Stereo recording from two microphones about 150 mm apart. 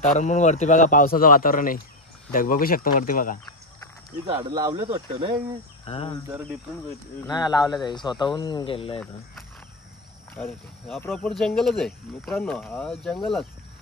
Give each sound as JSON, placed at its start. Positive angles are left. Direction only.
{"t": 0.0, "sound": "speech", "side_deg": 55}
{"t": 4.4, "sound": "speech", "side_deg": -25}
{"t": 5.9, "sound": "speech", "side_deg": 40}
{"t": 7.2, "sound": "speech", "side_deg": 25}
{"t": 10.3, "sound": "speech", "side_deg": 5}